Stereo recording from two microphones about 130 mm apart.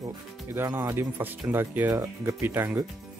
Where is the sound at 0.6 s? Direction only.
20° right (ahead or behind).